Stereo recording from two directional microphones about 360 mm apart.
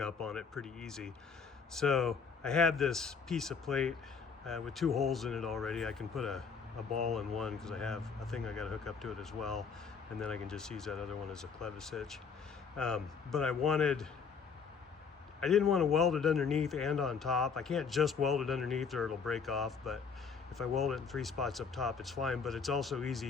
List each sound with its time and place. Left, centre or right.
0.0 s speech: centre
15.4 s speech: centre